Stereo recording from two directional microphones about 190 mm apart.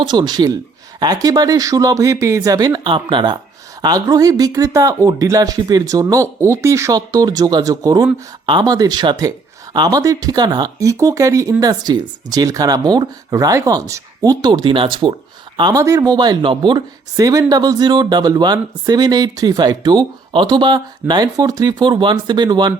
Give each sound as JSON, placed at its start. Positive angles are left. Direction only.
{"t": 0.0, "sound": "speech", "side_deg": -25}